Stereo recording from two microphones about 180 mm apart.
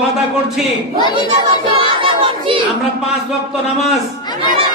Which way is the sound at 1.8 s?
30° right (ahead or behind).